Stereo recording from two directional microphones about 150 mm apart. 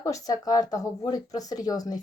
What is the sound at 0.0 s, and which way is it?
Speech, 25° left (ahead or behind).